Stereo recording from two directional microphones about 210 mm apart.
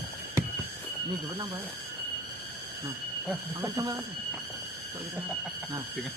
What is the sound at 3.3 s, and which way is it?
Speech, 15° right (ahead or behind).